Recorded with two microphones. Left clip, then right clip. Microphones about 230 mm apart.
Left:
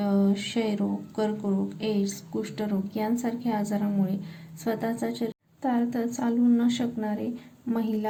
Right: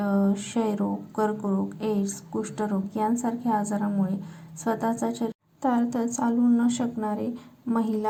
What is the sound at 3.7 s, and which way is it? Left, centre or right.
Speech, centre.